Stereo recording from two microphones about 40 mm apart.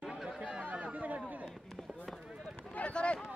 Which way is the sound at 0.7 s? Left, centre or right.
Right.